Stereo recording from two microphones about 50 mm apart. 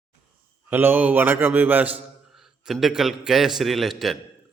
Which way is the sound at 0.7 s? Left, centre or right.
Right.